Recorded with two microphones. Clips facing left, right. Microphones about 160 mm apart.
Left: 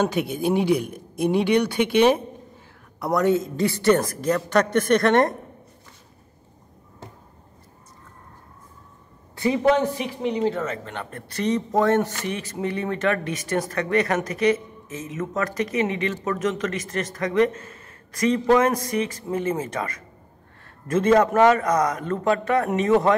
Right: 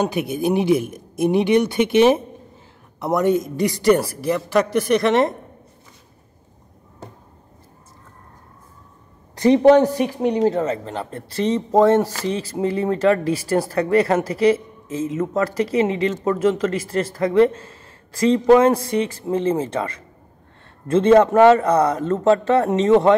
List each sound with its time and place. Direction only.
0.0 s a man's voice: 15° right (ahead or behind)
9.6 s speech: 35° right (ahead or behind)